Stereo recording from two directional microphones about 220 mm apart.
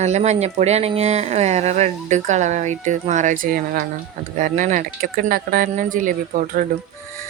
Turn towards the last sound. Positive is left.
turn(degrees=-35)  # may be behind; listen again after turning